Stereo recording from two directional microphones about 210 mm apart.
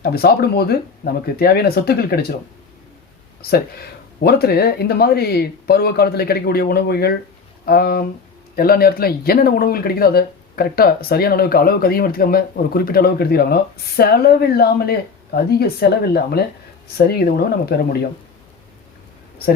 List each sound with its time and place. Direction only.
0.0 s speech: 50° left (ahead or behind)
4.2 s speech: 50° left (ahead or behind)